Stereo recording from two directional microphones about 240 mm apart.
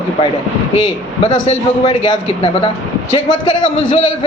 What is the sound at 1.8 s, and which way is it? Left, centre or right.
Speech, left.